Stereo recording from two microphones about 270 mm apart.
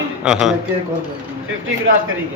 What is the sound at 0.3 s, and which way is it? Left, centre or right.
Speech, centre.